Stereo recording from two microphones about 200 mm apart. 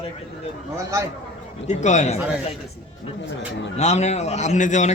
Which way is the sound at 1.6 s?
35° left (ahead or behind).